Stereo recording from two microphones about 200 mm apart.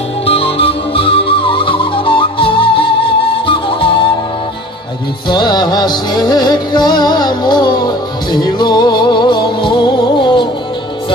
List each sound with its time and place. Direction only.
0.3 s music: 30° left (ahead or behind)
5.3 s music: 20° left (ahead or behind)